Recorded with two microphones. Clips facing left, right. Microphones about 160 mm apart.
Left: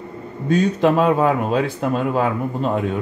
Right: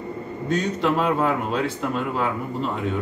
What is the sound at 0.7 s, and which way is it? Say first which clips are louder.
Speech: left 5 dB; 50° left (ahead or behind).